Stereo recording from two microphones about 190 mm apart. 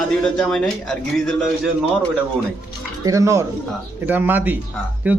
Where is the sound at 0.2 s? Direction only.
5° left (ahead or behind).